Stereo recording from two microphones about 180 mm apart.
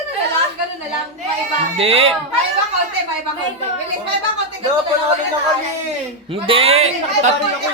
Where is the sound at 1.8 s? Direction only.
30° right (ahead or behind).